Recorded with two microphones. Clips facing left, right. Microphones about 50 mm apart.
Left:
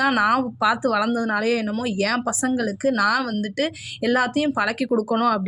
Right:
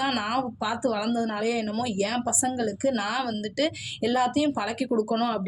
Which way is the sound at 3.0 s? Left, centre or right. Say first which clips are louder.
Left 8 dB; left.